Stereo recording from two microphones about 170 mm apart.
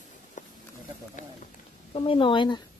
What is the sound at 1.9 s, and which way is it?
Speech, 30° left (ahead or behind).